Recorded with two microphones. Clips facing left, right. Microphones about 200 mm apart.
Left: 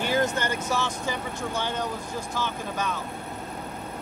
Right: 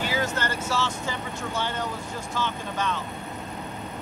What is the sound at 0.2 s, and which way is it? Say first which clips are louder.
Speech: left 2 dB; 15° left (ahead or behind).